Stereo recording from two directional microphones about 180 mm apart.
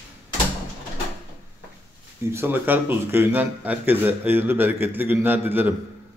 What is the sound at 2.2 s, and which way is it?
Speech, 15° right (ahead or behind).